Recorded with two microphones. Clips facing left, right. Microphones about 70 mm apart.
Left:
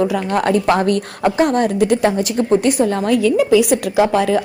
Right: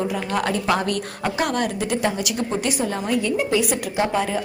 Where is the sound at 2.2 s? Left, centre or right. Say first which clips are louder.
Left 9 dB; left.